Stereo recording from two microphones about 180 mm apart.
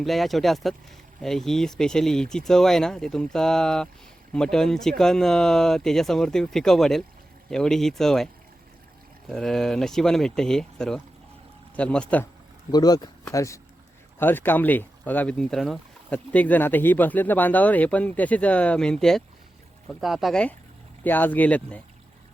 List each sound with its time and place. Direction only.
0.0 s speech: centre (ahead or behind)
12.7 s speech: 20° left (ahead or behind)